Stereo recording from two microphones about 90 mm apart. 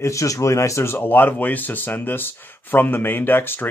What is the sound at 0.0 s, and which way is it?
Speech, 35° left (ahead or behind).